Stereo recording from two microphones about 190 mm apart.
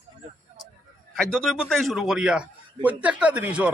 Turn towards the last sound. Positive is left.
turn(degrees=-5)  # may be behind; listen again after turning